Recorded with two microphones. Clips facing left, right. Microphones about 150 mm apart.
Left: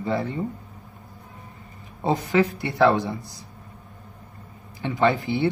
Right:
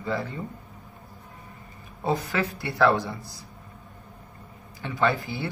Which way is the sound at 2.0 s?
20° left (ahead or behind).